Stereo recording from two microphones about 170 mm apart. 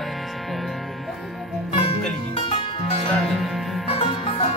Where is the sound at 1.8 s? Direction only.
35° left (ahead or behind).